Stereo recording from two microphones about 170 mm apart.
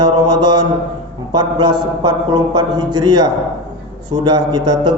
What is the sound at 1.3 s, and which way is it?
A man's voice, 25° right (ahead or behind).